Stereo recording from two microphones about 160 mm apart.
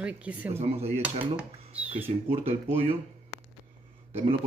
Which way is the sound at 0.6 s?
40° right (ahead or behind).